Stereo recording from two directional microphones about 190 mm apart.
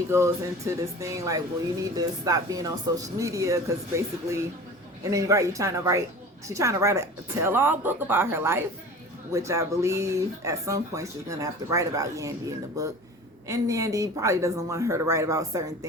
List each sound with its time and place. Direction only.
0.1 s speech: 15° right (ahead or behind)